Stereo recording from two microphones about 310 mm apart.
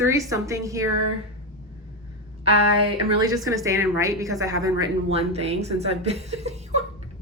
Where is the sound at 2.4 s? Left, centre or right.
Right.